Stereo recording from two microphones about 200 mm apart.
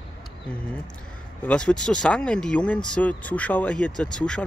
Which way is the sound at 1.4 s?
5° left (ahead or behind).